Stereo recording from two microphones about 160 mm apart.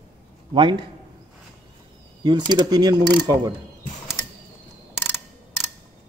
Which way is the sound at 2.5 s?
25° right (ahead or behind).